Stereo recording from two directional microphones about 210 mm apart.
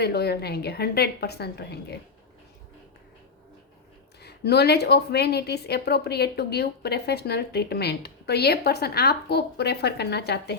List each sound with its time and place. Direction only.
0.0 s a woman's voice: 50° left (ahead or behind)
4.2 s a woman's voice: 50° left (ahead or behind)